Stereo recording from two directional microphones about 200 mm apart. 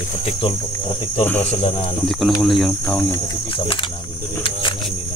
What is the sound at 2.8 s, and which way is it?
Cricket, 10° left (ahead or behind).